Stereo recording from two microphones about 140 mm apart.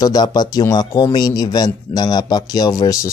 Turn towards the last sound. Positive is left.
turn(degrees=25)  # may be behind; listen again after turning